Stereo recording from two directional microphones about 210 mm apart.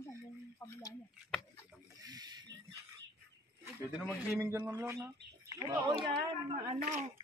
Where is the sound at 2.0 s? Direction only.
20° right (ahead or behind).